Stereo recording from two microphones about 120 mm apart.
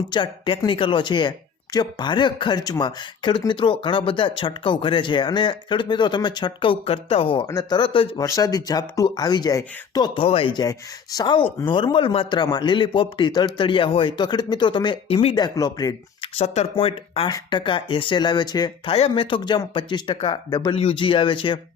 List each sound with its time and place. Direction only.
0.1 s speech: 40° left (ahead or behind)
7.4 s speech: 30° left (ahead or behind)
7.8 s speech: 45° left (ahead or behind)
8.2 s speech: 30° left (ahead or behind)
10.2 s speech: 50° left (ahead or behind)
15.4 s speech: 35° left (ahead or behind)
16.2 s speech: 55° left (ahead or behind); by 18.7 s 35° left (ahead or behind)
18.9 s speech: 50° left (ahead or behind)